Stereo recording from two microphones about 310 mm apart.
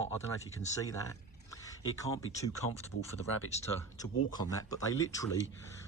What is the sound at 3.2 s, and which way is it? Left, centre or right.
Speech, left.